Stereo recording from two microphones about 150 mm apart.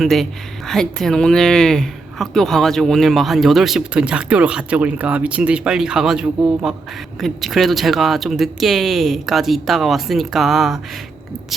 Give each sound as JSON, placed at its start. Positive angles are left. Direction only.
{"t": 0.0, "sound": "speech", "side_deg": 0}